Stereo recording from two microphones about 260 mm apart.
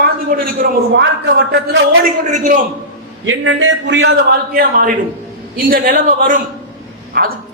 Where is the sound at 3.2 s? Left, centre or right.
Right.